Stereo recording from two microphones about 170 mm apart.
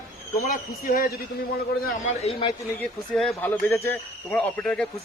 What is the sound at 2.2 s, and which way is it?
Speech, 35° left (ahead or behind).